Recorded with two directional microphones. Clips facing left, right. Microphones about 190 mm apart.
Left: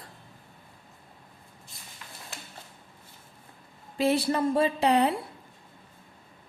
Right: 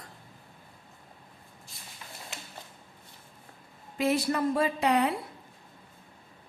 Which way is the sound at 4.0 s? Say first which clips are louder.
Left 2 dB; 30° left (ahead or behind).